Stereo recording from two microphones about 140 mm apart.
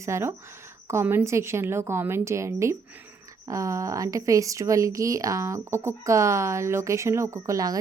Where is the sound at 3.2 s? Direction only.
25° right (ahead or behind).